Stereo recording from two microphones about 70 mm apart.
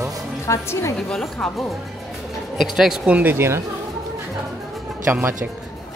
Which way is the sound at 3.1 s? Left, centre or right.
Right.